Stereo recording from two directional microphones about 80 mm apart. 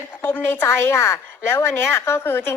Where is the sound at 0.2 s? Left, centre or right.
Left.